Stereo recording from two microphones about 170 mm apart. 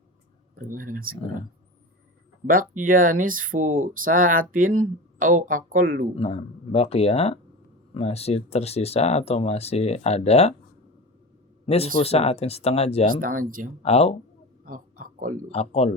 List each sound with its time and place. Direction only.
0.7 s speech: 55° right (ahead or behind)
2.5 s speech: 55° right (ahead or behind)
6.1 s speech: 35° left (ahead or behind)
11.6 s speech: 35° left (ahead or behind)
13.1 s speech: 55° right (ahead or behind)
13.8 s speech: 35° left (ahead or behind)
14.6 s a sound: 55° right (ahead or behind)
15.5 s speech: 35° left (ahead or behind)